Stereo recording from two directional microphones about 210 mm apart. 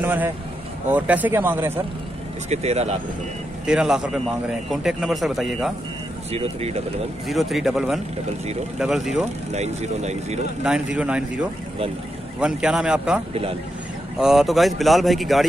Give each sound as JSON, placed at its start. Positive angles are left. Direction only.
{"t": 0.0, "sound": "speech", "side_deg": -10}
{"t": 2.5, "sound": "speech", "side_deg": -30}
{"t": 3.6, "sound": "speech", "side_deg": -5}
{"t": 6.3, "sound": "speech", "side_deg": -30}
{"t": 7.2, "sound": "speech", "side_deg": 0}
{"t": 9.5, "sound": "speech", "side_deg": -30}
{"t": 10.6, "sound": "speech", "side_deg": -5}
{"t": 12.4, "sound": "speech", "side_deg": -5}
{"t": 13.3, "sound": "speech", "side_deg": -25}
{"t": 14.1, "sound": "speech", "side_deg": 0}